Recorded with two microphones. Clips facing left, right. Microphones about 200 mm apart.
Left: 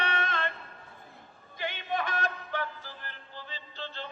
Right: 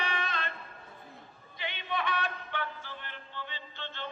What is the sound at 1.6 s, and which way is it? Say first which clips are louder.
Music: left 3 dB; 45° left (ahead or behind).